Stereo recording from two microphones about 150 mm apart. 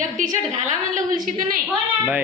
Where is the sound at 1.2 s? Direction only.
65° right (ahead or behind).